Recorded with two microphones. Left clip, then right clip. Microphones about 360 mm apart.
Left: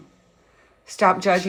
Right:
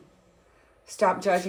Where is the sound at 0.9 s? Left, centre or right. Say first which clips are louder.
Left 5 dB; left.